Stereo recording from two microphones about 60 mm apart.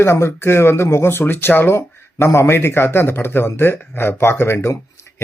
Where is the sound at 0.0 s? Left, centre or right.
Left.